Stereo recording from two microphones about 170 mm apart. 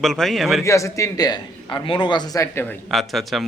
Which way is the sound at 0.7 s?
20° left (ahead or behind).